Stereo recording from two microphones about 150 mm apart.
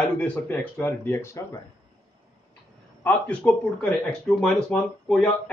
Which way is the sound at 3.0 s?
10° left (ahead or behind).